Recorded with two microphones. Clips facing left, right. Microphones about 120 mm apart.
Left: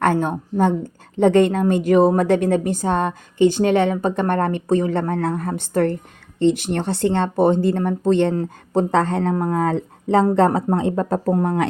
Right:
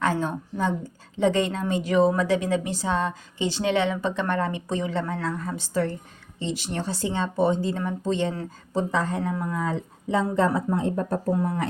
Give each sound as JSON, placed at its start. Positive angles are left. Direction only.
{"t": 0.0, "sound": "a woman's voice", "side_deg": 55}
{"t": 11.4, "sound": "speech", "side_deg": 75}